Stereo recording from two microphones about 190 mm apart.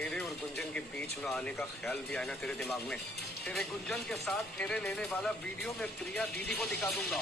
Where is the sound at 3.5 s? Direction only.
Centre (ahead or behind).